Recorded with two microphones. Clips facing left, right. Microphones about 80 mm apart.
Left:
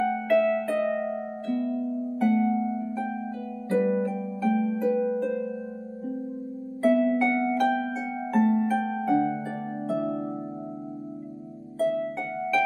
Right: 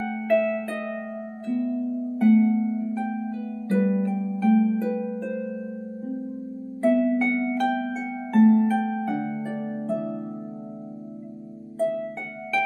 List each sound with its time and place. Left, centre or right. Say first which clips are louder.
0.0 s harp: even; centre
2.3 s harp: right 4 dB; centre
4.9 s harp: left 4 dB; centre
5.2 s harp: left 2 dB; centre
6.9 s harp: right 1 dB; centre
11.8 s harp: even; centre